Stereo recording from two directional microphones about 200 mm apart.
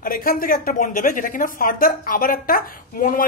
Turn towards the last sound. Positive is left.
turn(degrees=45)  # may be behind; listen again after turning